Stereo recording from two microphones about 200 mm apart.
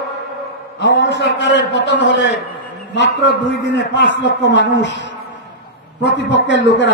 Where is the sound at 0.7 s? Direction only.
60° left (ahead or behind).